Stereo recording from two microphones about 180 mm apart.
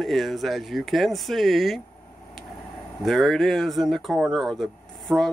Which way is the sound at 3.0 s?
Centre (ahead or behind).